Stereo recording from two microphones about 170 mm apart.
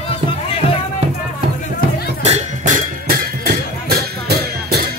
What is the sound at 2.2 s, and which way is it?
Music, 45° right (ahead or behind).